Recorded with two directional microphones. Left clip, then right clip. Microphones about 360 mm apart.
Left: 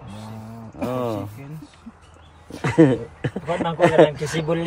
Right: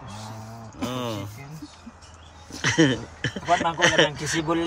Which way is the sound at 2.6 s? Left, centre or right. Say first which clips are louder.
Left 4 dB; centre.